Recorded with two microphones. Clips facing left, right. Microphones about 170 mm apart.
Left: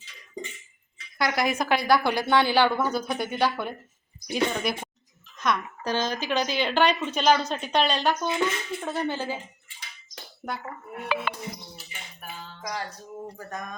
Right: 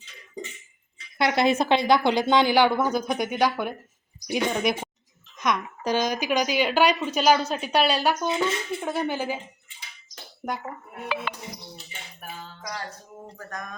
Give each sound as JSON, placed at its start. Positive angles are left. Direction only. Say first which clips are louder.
{"t": 1.2, "sound": "a woman's voice", "louder": "right 4 dB", "side_deg": -25}
{"t": 10.4, "sound": "a woman's voice", "louder": "right 3 dB", "side_deg": -15}
{"t": 11.1, "sound": "music", "louder": "left 2 dB", "side_deg": 50}
{"t": 13.3, "sound": "a sound", "louder": "left 1 dB", "side_deg": 5}